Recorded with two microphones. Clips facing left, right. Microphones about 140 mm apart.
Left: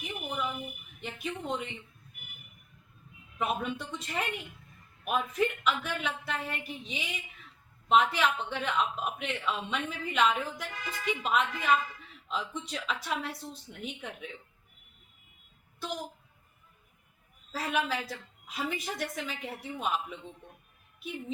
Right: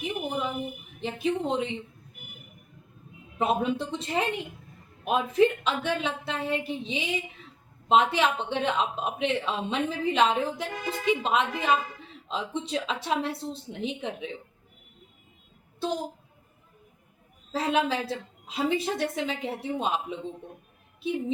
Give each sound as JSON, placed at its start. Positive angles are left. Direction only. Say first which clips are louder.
{"t": 0.0, "sound": "a sound", "louder": "right 5 dB", "side_deg": -30}
{"t": 1.0, "sound": "speech", "louder": "right 9 dB", "side_deg": -30}
{"t": 3.3, "sound": "speech", "louder": "right 6 dB", "side_deg": -30}
{"t": 15.8, "sound": "speech", "louder": "right 8 dB", "side_deg": -30}
{"t": 17.5, "sound": "speech", "louder": "right 6 dB", "side_deg": -25}